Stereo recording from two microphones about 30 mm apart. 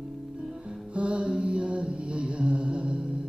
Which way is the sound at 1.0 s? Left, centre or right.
Right.